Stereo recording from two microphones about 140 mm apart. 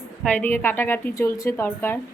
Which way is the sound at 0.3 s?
10° left (ahead or behind).